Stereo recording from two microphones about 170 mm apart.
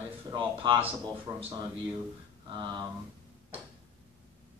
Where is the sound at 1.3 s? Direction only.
15° right (ahead or behind).